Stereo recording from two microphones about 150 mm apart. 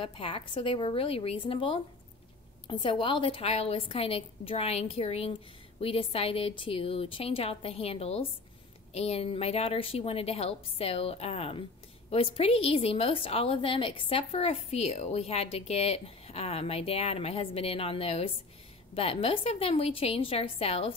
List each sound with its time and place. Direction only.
0.0 s a woman's voice: 35° left (ahead or behind)